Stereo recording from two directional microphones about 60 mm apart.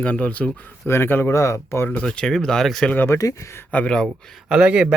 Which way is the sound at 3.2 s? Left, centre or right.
Left.